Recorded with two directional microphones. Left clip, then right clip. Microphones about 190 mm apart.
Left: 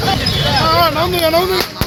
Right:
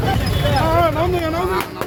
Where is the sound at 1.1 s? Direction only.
40° left (ahead or behind).